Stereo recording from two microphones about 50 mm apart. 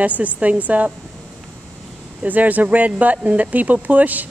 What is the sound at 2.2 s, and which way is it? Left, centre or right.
Speech, right.